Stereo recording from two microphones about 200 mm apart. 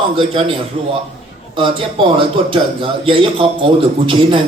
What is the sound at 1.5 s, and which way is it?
A man's voice, 25° right (ahead or behind).